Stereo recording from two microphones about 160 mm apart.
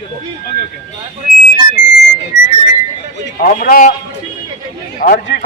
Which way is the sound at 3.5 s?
55° left (ahead or behind).